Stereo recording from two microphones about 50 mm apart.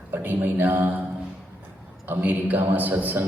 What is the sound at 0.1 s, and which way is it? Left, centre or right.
Speech, right.